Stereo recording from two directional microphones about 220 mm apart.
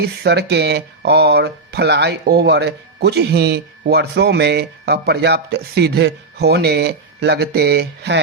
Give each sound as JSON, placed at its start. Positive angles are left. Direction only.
{"t": 0.0, "sound": "speech", "side_deg": -50}